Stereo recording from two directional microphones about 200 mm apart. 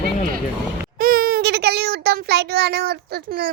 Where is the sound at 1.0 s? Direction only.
45° right (ahead or behind).